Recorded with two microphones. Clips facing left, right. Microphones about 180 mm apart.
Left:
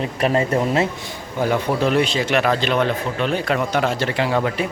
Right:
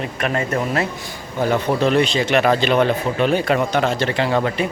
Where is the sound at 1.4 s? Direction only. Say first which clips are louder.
Right 1 dB; 10° left (ahead or behind).